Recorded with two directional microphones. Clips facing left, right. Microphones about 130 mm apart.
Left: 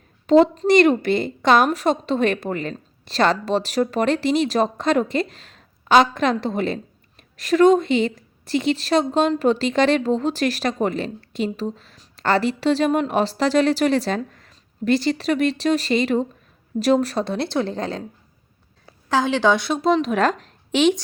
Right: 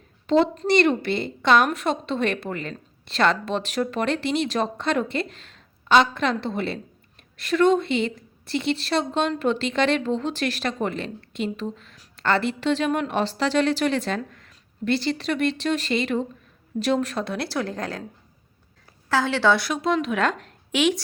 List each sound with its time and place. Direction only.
0.3 s a woman's voice: 45° left (ahead or behind); by 18.0 s 25° left (ahead or behind)
19.0 s speech: 20° left (ahead or behind)
19.7 s a woman's voice: 35° left (ahead or behind)